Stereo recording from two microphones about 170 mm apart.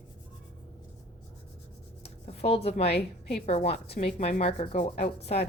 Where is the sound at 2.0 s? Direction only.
35° left (ahead or behind).